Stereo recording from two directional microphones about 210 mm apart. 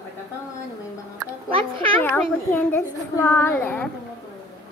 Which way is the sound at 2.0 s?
10° left (ahead or behind).